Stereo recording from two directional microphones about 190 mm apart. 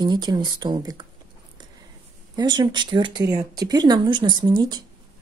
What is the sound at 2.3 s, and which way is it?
A woman's voice, 25° right (ahead or behind).